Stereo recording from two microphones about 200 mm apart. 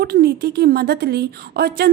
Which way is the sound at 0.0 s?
50° right (ahead or behind).